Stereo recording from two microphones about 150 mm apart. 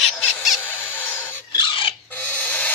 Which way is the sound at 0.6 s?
15° left (ahead or behind).